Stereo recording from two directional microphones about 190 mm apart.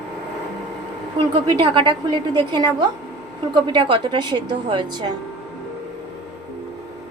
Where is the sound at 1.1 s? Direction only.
25° right (ahead or behind).